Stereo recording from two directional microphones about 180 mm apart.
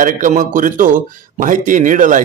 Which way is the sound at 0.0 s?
45° right (ahead or behind).